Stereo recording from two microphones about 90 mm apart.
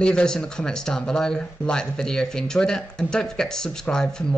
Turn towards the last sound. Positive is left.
turn(degrees=5)  # may be behind; listen again after turning